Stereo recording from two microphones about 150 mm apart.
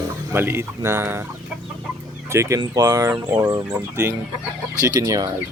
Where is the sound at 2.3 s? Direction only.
20° right (ahead or behind).